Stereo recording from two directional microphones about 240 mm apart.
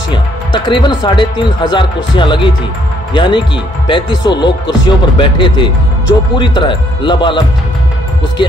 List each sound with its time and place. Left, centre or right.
0.1 s speech: centre